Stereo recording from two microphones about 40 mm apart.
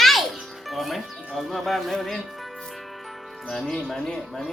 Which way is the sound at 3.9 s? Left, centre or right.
Centre.